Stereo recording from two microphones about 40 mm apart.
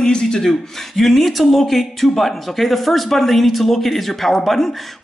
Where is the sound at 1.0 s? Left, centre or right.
Centre.